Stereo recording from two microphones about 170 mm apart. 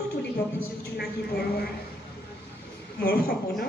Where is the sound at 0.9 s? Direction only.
65° left (ahead or behind).